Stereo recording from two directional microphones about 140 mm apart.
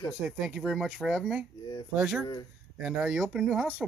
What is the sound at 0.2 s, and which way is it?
Speech, centre (ahead or behind).